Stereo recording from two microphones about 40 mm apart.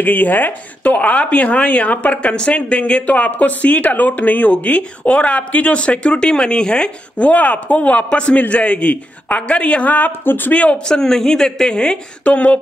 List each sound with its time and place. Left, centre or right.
0.0 s speech: left
9.8 s speech: left
10.5 s speech: left
10.9 s a woman's voice: centre